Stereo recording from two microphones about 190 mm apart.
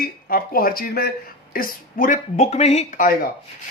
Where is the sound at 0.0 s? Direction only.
50° left (ahead or behind).